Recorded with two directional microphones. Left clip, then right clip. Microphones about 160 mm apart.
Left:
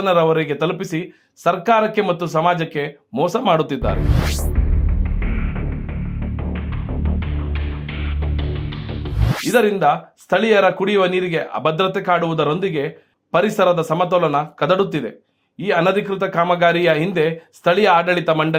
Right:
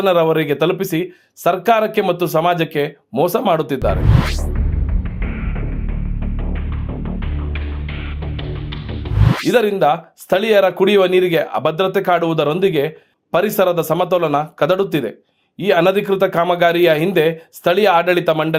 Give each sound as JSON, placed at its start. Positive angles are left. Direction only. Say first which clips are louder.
{"t": 0.0, "sound": "a man's voice", "louder": "right 2 dB", "side_deg": -30}
{"t": 5.2, "sound": "music", "louder": "even", "side_deg": 0}
{"t": 7.0, "sound": "music", "louder": "even", "side_deg": 0}
{"t": 9.5, "sound": "a man's voice", "louder": "right 1 dB", "side_deg": -30}